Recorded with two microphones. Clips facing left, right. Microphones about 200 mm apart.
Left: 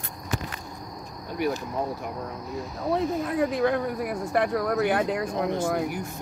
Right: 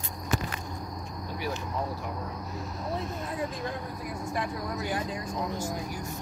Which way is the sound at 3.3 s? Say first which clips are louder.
Left 10 dB; 70° left (ahead or behind).